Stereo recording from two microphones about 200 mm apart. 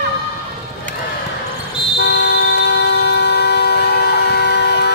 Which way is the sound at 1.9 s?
55° left (ahead or behind).